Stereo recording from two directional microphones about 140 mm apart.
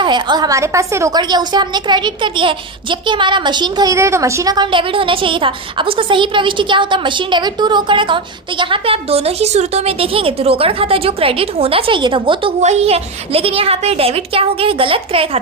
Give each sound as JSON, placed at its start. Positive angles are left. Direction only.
{"t": 0.0, "sound": "a woman's voice", "side_deg": -30}
{"t": 12.6, "sound": "a woman's voice", "side_deg": -50}